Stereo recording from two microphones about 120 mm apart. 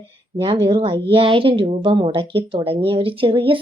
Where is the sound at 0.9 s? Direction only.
45° right (ahead or behind).